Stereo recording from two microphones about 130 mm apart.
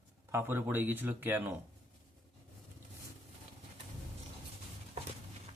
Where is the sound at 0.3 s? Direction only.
20° right (ahead or behind).